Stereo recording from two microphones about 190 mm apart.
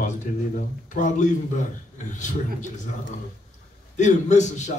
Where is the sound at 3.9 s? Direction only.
40° left (ahead or behind).